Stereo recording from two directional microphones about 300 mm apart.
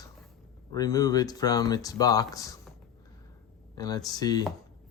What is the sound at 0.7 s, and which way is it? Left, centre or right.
Speech, centre.